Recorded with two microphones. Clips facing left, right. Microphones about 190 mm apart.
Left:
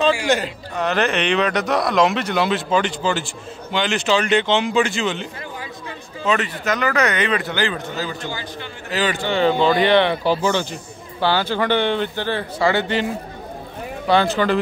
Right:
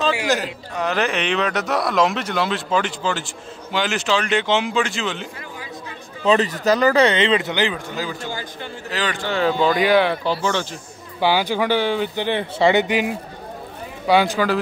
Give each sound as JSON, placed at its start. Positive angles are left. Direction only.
{"t": 0.0, "sound": "speech", "side_deg": 0}
{"t": 6.2, "sound": "speech", "side_deg": -35}
{"t": 7.7, "sound": "speech", "side_deg": -10}
{"t": 8.9, "sound": "speech", "side_deg": 0}
{"t": 10.2, "sound": "speech", "side_deg": 10}
{"t": 11.1, "sound": "speech", "side_deg": -15}
{"t": 12.3, "sound": "speech", "side_deg": -20}